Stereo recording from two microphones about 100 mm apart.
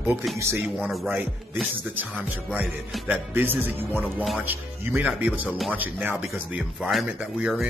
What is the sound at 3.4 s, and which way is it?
Music, 20° right (ahead or behind).